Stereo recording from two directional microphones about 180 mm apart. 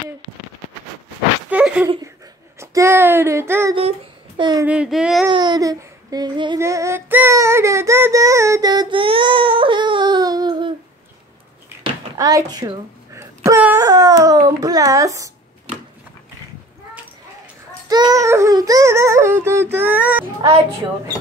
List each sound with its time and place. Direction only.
1.5 s a sound: 10° right (ahead or behind)
2.6 s music: 15° right (ahead or behind)
4.4 s speech: 25° right (ahead or behind)
4.6 s child singing: 5° right (ahead or behind)
5.3 s a sound: 25° right (ahead or behind)
11.8 s speech: 20° right (ahead or behind)
17.8 s music: 20° right (ahead or behind)